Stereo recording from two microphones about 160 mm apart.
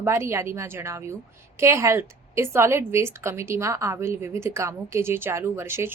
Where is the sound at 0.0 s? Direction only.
15° right (ahead or behind).